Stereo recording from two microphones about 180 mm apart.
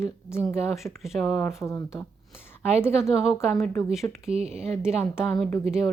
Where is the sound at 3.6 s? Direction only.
15° left (ahead or behind).